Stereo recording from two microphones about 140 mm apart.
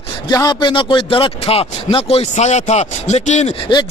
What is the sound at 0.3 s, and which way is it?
A man's voice, 30° left (ahead or behind).